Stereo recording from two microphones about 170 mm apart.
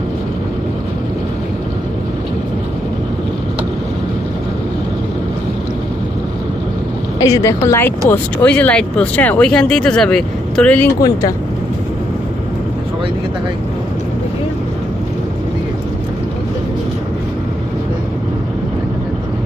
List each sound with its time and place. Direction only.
7.2 s speech: 20° left (ahead or behind)
11.0 s speech: 20° left (ahead or behind)